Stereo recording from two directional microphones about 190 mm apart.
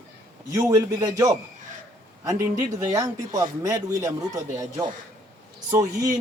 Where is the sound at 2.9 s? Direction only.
15° right (ahead or behind).